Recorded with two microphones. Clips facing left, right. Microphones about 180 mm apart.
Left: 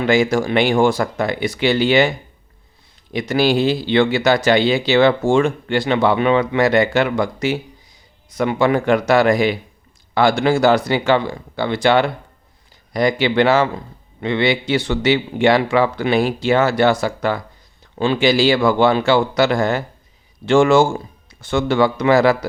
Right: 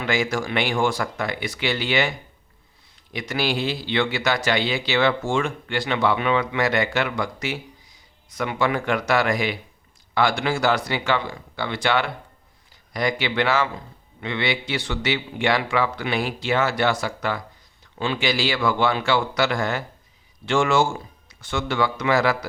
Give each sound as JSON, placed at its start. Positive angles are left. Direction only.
{"t": 0.0, "sound": "speech", "side_deg": 25}
{"t": 8.4, "sound": "speech", "side_deg": 30}